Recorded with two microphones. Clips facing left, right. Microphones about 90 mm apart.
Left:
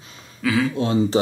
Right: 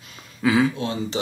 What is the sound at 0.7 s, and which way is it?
Speech, 30° left (ahead or behind).